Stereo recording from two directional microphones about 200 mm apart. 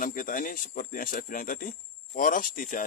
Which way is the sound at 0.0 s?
45° left (ahead or behind).